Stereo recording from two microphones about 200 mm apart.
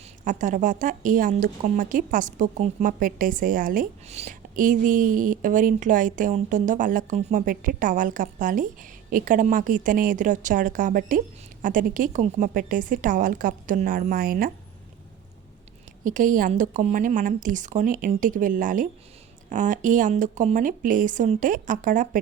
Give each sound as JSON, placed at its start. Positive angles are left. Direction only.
{"t": 0.3, "sound": "a woman's voice", "side_deg": -40}
{"t": 16.0, "sound": "a woman's voice", "side_deg": -40}